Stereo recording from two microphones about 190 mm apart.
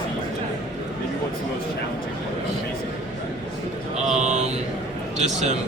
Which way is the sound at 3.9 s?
35° right (ahead or behind).